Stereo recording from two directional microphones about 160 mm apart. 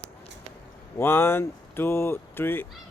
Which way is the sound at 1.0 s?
15° left (ahead or behind).